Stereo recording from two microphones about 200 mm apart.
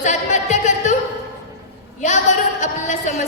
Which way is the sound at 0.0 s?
35° left (ahead or behind).